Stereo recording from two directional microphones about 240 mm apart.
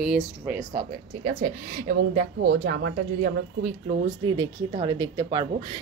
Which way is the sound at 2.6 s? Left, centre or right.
Right.